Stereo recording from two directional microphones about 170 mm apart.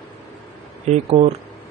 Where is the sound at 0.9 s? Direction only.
40° right (ahead or behind).